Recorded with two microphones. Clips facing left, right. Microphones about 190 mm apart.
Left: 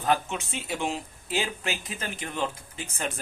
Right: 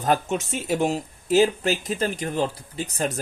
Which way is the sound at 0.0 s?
40° right (ahead or behind).